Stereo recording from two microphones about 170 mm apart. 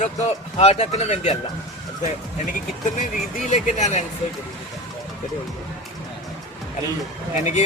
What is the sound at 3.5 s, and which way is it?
Speech, 40° left (ahead or behind).